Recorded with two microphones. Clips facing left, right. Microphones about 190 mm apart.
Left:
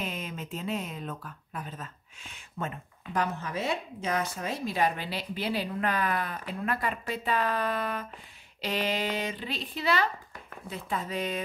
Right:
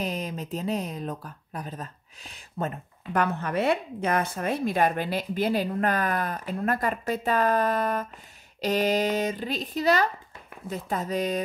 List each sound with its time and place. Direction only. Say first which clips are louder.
0.0 s speech: right 5 dB; 35° right (ahead or behind)
3.1 s speech: right 5 dB; 60° right (ahead or behind); by 11.4 s 40° right (ahead or behind)